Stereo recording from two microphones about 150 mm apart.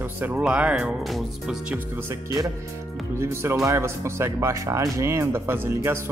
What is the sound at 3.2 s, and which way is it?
Speech, 15° right (ahead or behind).